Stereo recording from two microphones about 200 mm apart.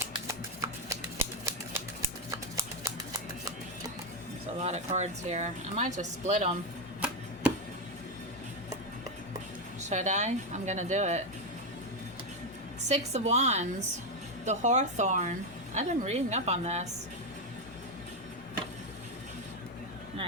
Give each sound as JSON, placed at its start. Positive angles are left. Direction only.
{"t": 0.3, "sound": "a sound", "side_deg": -15}
{"t": 4.6, "sound": "speech", "side_deg": -35}
{"t": 9.9, "sound": "speech", "side_deg": -35}
{"t": 13.1, "sound": "speech", "side_deg": -35}